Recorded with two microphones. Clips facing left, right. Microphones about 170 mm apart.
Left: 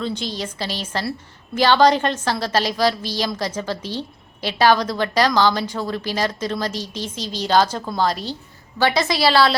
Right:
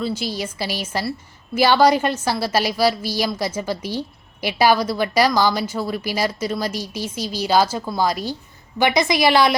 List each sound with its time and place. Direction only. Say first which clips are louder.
0.0 s a woman's voice: right 1 dB; 5° right (ahead or behind)